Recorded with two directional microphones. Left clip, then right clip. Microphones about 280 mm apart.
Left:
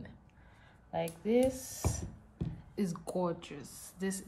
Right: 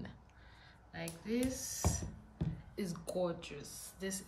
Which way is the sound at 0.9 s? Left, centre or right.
Centre.